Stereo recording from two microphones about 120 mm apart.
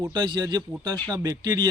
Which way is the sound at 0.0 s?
35° right (ahead or behind).